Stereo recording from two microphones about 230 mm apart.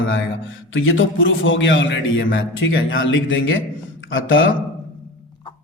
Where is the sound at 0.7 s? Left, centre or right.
Left.